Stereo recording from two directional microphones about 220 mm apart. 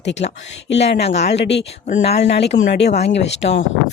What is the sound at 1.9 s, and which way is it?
Speech, 30° left (ahead or behind).